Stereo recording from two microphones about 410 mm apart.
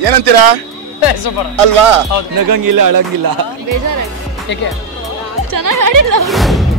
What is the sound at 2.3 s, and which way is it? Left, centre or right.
Speech, right.